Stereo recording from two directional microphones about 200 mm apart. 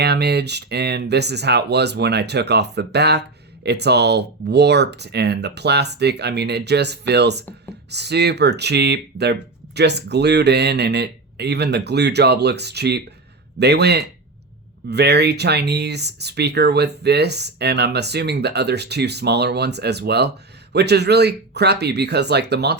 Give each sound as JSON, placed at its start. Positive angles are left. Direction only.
{"t": 0.0, "sound": "speech", "side_deg": -55}